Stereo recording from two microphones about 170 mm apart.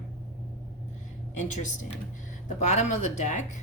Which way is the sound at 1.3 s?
45° left (ahead or behind).